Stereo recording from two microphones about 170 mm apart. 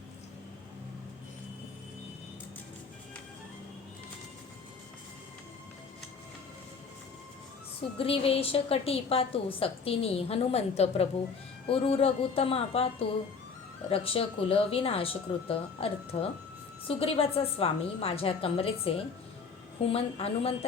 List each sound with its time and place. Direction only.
7.9 s a woman's voice: 35° left (ahead or behind)